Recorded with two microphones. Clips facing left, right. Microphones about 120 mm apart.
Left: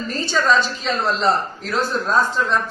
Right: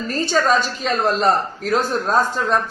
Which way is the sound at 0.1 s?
45° right (ahead or behind).